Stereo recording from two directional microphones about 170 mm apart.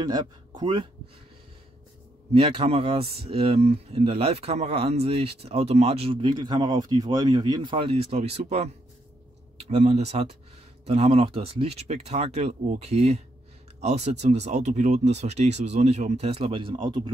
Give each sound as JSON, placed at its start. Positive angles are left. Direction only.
{"t": 0.0, "sound": "speech", "side_deg": -25}
{"t": 2.3, "sound": "speech", "side_deg": -35}